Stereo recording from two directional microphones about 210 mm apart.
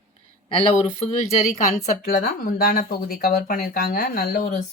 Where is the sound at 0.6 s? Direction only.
30° left (ahead or behind).